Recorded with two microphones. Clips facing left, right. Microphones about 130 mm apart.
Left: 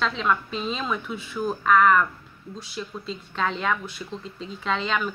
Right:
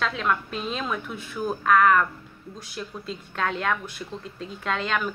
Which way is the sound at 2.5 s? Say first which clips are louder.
Left 2 dB; 50° right (ahead or behind).